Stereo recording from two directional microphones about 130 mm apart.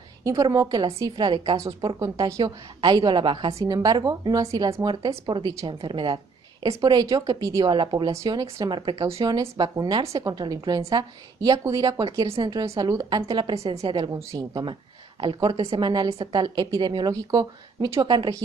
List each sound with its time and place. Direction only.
0.2 s a woman's voice: 25° right (ahead or behind)
3.5 s a woman's voice: 30° right (ahead or behind)
5.3 s a woman's voice: 35° right (ahead or behind)
18.0 s a woman's voice: 35° right (ahead or behind)